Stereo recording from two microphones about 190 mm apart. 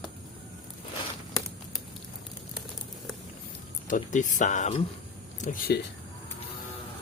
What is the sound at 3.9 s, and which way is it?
Speech, 40° left (ahead or behind).